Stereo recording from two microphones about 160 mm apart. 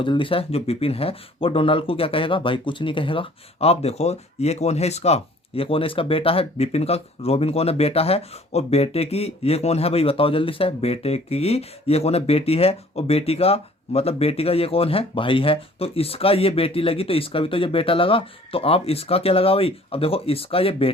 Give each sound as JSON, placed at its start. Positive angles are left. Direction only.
{"t": 0.0, "sound": "speech", "side_deg": 30}